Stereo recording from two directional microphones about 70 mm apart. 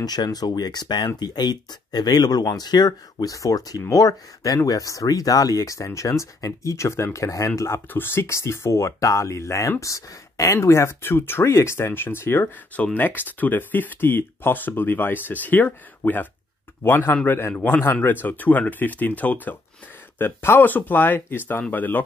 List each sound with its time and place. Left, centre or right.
0.0 s speech: left
3.3 s speech: left